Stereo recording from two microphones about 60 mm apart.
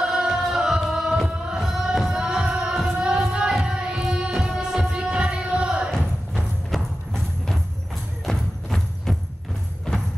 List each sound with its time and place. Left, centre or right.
0.0 s music: centre
6.7 s clip-clop: centre
8.3 s music: centre